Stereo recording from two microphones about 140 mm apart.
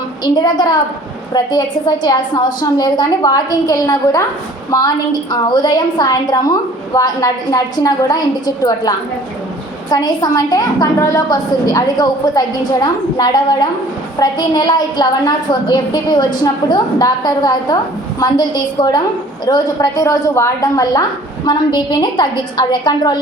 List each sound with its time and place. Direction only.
0.3 s a woman's voice: 30° left (ahead or behind)